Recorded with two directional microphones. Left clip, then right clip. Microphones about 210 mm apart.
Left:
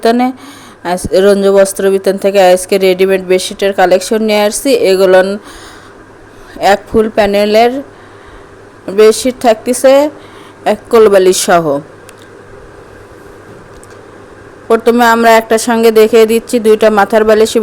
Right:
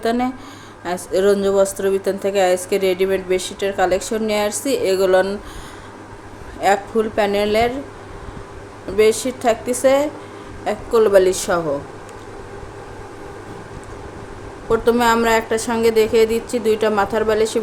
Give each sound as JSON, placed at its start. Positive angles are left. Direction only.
{"t": 0.0, "sound": "a woman's voice", "side_deg": 40}
{"t": 6.6, "sound": "a woman's voice", "side_deg": 40}
{"t": 8.9, "sound": "a woman's voice", "side_deg": 40}
{"t": 14.7, "sound": "a woman's voice", "side_deg": 40}